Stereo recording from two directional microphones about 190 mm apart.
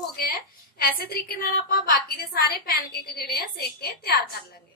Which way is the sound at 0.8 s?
50° left (ahead or behind).